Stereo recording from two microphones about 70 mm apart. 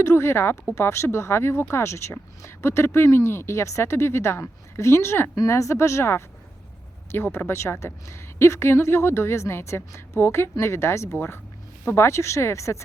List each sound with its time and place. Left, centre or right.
0.0 s speech: left
5.3 s speech: left